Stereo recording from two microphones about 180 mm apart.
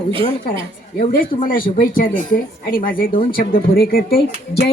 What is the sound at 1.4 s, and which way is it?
Speech, 50° left (ahead or behind).